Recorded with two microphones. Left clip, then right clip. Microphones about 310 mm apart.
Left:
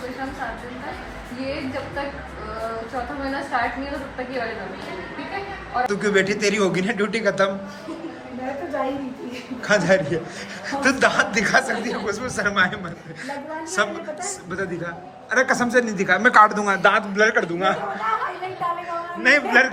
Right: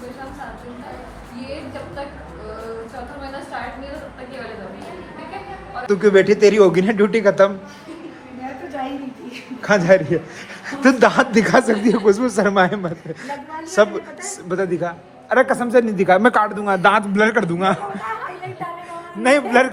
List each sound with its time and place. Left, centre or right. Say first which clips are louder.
5.9 s speech: right 10 dB; centre
9.6 s speech: right 4 dB; centre
16.8 s speech: right 3 dB; centre
19.2 s speech: right 2 dB; centre